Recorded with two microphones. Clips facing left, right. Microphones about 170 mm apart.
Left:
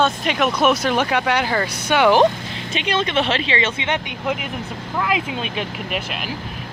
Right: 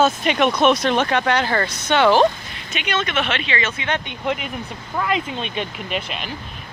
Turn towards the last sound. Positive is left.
turn(degrees=5)  # may be behind; listen again after turning